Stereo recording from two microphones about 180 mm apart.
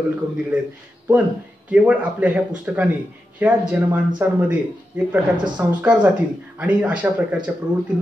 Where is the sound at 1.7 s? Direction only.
5° right (ahead or behind).